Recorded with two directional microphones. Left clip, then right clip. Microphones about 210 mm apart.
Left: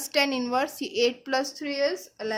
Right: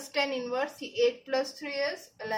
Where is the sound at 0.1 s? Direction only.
50° left (ahead or behind).